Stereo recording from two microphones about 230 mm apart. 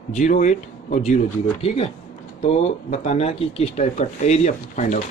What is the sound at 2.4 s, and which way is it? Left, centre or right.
Speech, left.